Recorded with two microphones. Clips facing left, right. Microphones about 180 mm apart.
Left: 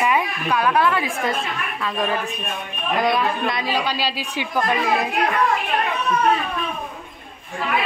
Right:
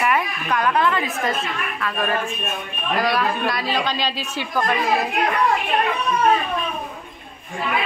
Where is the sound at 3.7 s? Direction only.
10° left (ahead or behind).